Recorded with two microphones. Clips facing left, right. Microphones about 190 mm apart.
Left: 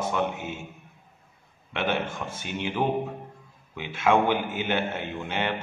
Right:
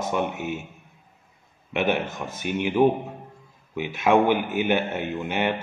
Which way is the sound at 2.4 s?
15° right (ahead or behind).